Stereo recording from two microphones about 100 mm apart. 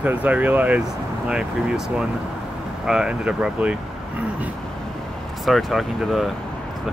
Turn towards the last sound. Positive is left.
turn(degrees=0)  # may be behind; listen again after turning